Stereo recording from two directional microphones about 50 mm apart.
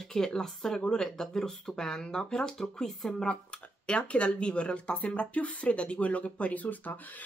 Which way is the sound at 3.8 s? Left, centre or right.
Left.